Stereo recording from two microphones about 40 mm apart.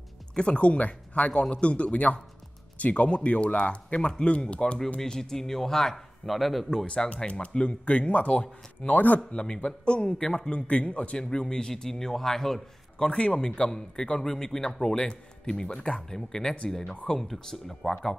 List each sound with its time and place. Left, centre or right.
0.3 s speech: left
5.0 s a man's voice: centre
7.1 s speech: left
8.9 s speech: left
9.3 s speech: left
10.1 s a man's voice: centre
10.5 s speech: left
11.1 s a man's voice: centre
13.0 s a man's voice: left